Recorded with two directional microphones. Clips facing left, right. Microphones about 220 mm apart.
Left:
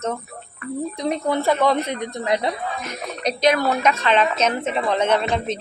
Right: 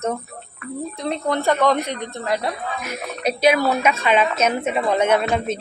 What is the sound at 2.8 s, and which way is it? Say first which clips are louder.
A woman's voice: right 1 dB; 10° right (ahead or behind).